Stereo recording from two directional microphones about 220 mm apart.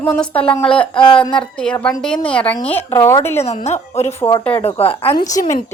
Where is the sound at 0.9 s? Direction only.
20° left (ahead or behind).